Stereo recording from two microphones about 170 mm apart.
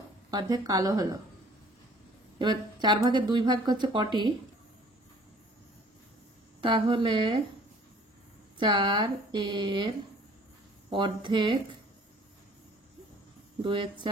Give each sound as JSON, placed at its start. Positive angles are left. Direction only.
{"t": 0.3, "sound": "speech", "side_deg": -25}
{"t": 2.3, "sound": "speech", "side_deg": -25}
{"t": 6.6, "sound": "speech", "side_deg": -30}
{"t": 8.5, "sound": "speech", "side_deg": -30}
{"t": 13.6, "sound": "speech", "side_deg": -30}